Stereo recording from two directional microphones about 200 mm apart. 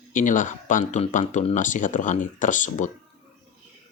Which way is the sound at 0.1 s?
40° left (ahead or behind).